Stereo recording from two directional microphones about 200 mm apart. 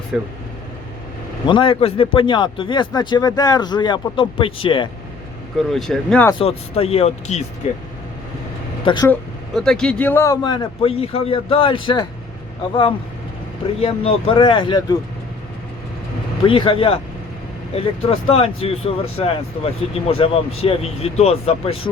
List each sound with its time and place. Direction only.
0.1 s speech: 5° right (ahead or behind)
1.5 s a man's voice: 25° left (ahead or behind)
5.5 s speech: centre (ahead or behind)
6.4 s a man's voice: 30° left (ahead or behind)
8.8 s speech: 25° left (ahead or behind)
9.6 s a man's voice: 5° left (ahead or behind); by 12.0 s 25° left (ahead or behind)
14.0 s a man's voice: 25° left (ahead or behind)
16.4 s a man's voice: 25° left (ahead or behind)